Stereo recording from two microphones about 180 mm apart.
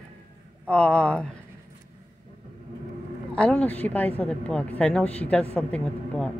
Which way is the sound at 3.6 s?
10° left (ahead or behind).